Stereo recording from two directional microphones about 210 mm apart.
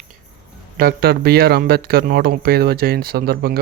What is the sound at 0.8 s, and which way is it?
Speech, 45° right (ahead or behind).